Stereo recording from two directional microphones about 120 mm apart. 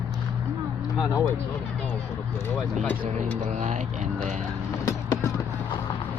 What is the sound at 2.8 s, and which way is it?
Speech, 10° left (ahead or behind).